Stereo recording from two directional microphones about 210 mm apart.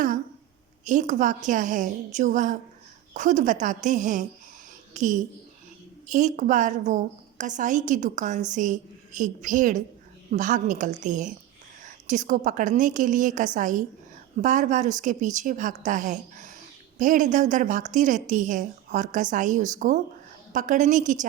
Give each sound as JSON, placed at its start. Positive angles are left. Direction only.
{"t": 0.9, "sound": "a woman's voice", "side_deg": -35}